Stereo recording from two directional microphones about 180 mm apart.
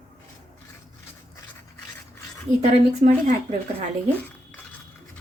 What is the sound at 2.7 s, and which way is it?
Speech, 35° right (ahead or behind).